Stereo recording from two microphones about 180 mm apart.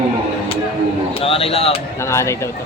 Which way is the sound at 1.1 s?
30° left (ahead or behind).